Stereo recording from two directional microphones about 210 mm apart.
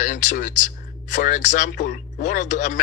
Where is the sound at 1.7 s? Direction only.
50° left (ahead or behind).